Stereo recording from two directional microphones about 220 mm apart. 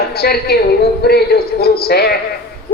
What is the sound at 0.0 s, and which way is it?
A woman's voice, 45° left (ahead or behind).